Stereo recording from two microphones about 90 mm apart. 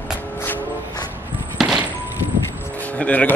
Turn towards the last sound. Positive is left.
turn(degrees=15)  # may be behind; listen again after turning